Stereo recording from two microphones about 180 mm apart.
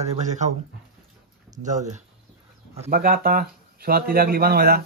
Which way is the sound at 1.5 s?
40° right (ahead or behind).